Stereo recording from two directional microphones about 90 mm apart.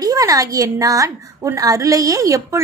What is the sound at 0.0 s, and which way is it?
A woman's voice, 40° right (ahead or behind).